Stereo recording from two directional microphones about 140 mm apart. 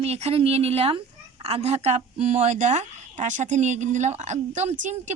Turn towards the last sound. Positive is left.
turn(degrees=-60)  # may be behind; listen again after turning